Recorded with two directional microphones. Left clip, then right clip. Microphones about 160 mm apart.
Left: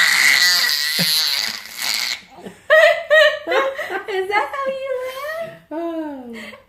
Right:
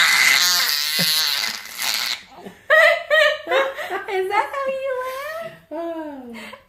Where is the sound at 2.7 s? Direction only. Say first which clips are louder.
Left 2 dB; 35° left (ahead or behind).